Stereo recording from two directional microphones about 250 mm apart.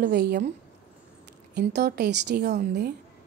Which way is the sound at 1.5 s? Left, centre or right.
Right.